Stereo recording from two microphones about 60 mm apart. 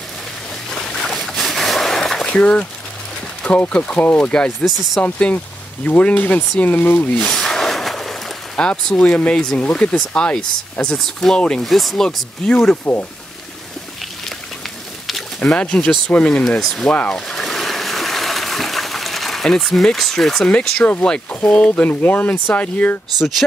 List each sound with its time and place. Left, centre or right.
0.7 s a sound: centre
3.4 s speech: left
4.6 s speech: centre
5.9 s speech: left
7.1 s a sound: centre
8.5 s speech: centre
11.6 s speech: centre
12.4 s speech: centre
15.0 s a sound: centre
15.5 s speech: centre
16.4 s speech: centre
17.1 s splash: centre
20.4 s speech: centre
23.1 s speech: centre